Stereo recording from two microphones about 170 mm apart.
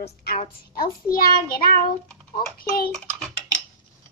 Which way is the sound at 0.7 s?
60° left (ahead or behind).